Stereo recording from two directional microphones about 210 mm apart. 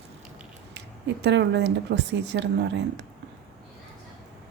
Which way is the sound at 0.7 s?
55° right (ahead or behind).